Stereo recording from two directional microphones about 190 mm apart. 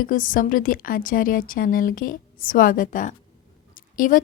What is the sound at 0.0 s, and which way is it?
A woman's voice, 45° left (ahead or behind).